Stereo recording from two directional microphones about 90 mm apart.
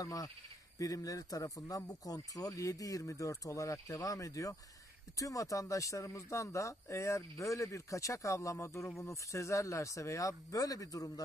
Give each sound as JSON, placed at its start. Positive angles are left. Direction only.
{"t": 0.0, "sound": "speech", "side_deg": 40}